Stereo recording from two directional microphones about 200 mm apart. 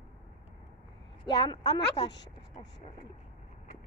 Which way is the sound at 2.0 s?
60° left (ahead or behind).